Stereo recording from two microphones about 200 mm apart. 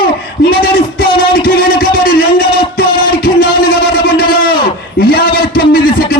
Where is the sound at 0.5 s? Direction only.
50° left (ahead or behind).